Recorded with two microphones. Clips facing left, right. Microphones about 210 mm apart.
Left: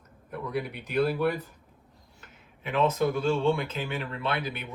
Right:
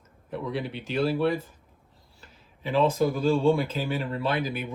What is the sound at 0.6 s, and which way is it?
Speech, 25° right (ahead or behind).